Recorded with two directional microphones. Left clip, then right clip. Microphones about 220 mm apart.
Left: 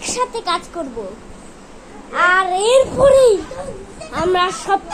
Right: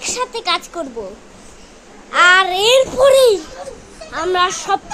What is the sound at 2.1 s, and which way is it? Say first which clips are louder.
A child's voice: right 3 dB; 20° right (ahead or behind).